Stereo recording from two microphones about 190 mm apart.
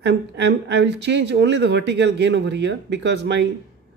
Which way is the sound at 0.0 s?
65° right (ahead or behind).